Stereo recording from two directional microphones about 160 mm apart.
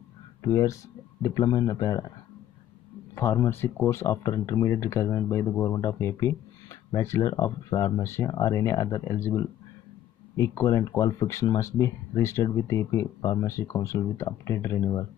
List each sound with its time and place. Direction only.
0.4 s speech: 20° left (ahead or behind)
3.2 s speech: 15° left (ahead or behind)